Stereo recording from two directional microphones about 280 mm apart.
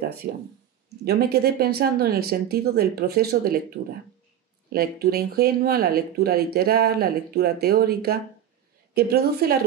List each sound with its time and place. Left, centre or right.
0.0 s speech: right